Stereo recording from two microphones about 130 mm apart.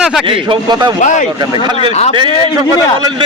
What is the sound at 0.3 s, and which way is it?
Speech, 40° right (ahead or behind).